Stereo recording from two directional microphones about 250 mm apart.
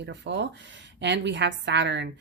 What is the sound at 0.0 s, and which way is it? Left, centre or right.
A woman's voice, right.